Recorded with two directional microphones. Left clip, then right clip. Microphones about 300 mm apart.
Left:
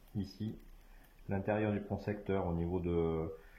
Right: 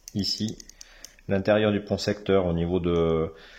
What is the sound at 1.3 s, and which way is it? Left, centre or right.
Speech, right.